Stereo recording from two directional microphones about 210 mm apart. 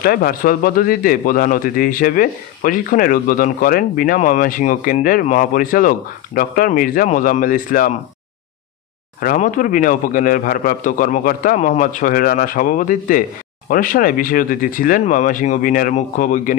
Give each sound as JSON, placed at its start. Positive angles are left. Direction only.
{"t": 0.0, "sound": "a man's voice", "side_deg": 45}
{"t": 9.2, "sound": "a man's voice", "side_deg": 40}